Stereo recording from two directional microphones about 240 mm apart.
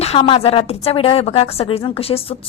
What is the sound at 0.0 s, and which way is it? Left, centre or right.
A woman's voice, left.